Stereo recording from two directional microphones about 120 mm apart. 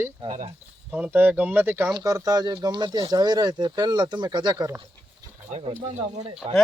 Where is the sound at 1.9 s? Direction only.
35° right (ahead or behind).